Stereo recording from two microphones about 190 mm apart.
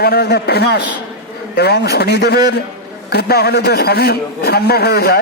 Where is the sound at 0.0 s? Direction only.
55° left (ahead or behind).